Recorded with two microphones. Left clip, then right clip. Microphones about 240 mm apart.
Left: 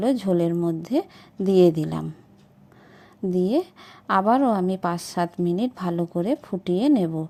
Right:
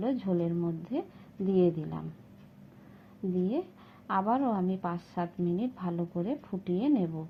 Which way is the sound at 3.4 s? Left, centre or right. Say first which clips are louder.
Left 10 dB; left.